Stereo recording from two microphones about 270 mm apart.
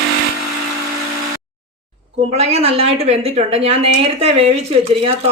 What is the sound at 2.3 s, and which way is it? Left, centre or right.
Speech, right.